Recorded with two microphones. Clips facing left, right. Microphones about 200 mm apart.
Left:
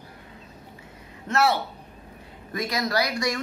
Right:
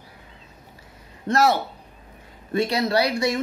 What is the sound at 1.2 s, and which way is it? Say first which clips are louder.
Speech: right 3 dB; 35° right (ahead or behind).